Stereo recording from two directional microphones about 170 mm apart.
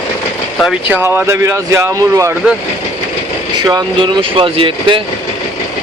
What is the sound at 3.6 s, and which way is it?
Speech, 25° right (ahead or behind).